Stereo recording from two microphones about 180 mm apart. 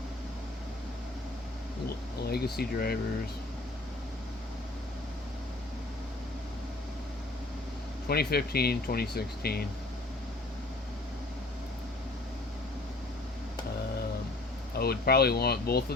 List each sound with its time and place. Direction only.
2.2 s speech: 60° left (ahead or behind)
8.0 s speech: 60° left (ahead or behind)
14.8 s speech: 60° left (ahead or behind)